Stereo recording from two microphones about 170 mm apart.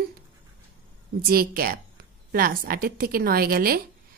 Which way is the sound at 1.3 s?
60° right (ahead or behind).